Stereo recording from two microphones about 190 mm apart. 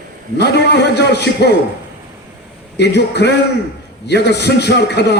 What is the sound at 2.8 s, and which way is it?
A man's voice, 60° left (ahead or behind).